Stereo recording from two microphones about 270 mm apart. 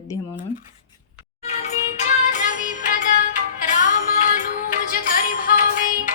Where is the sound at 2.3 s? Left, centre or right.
Left.